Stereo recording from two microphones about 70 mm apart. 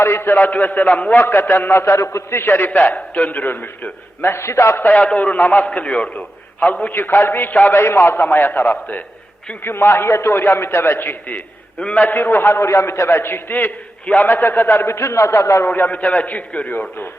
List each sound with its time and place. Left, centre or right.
0.0 s a man's voice: left
0.4 s a man's voice: left
1.2 s a man's voice: left
2.6 s a man's voice: left
4.9 s a man's voice: centre
9.6 s a man's voice: left
11.3 s a man's voice: centre
12.0 s a man's voice: left
15.6 s a man's voice: left